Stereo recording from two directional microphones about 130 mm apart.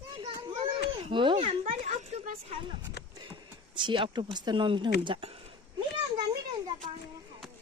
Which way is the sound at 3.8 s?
40° right (ahead or behind).